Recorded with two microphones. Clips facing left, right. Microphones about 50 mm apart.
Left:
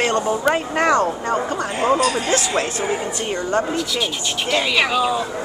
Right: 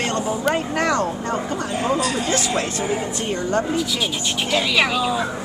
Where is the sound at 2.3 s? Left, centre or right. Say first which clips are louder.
Left 2 dB; left.